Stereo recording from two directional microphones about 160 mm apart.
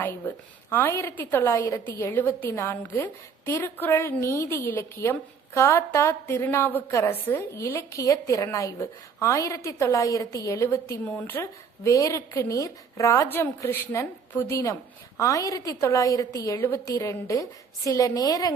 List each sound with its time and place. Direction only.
0.0 s a woman's voice: 10° left (ahead or behind)